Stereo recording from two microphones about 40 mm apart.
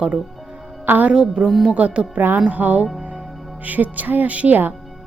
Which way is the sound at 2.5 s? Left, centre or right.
Right.